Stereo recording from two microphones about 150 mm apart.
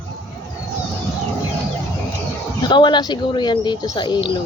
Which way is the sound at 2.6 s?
30° left (ahead or behind).